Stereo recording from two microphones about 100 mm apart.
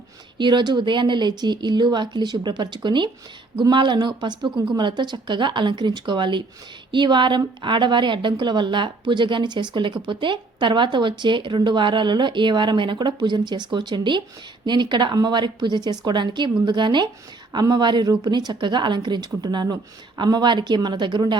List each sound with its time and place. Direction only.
0.3 s a woman's voice: 50° right (ahead or behind)